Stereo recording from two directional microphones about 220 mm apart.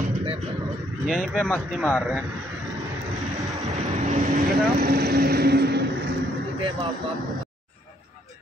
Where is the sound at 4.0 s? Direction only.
35° right (ahead or behind).